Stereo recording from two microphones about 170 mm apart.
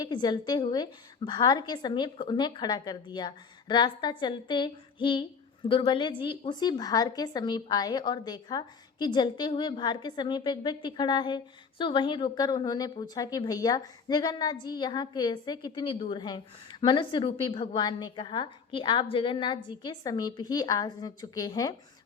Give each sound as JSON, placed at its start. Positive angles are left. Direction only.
{"t": 0.0, "sound": "a woman's voice", "side_deg": 25}